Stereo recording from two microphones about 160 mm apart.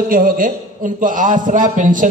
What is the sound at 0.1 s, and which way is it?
A man's voice, 60° right (ahead or behind).